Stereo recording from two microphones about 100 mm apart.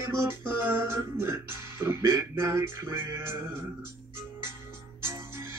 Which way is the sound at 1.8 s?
25° right (ahead or behind).